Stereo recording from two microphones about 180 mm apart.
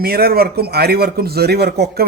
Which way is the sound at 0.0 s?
55° right (ahead or behind).